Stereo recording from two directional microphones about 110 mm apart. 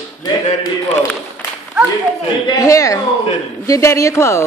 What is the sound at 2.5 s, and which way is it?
Speech, 30° left (ahead or behind).